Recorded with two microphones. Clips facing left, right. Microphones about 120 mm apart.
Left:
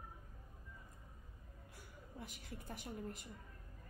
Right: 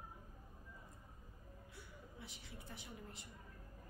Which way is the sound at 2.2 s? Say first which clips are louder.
Left 6 dB; 45° left (ahead or behind).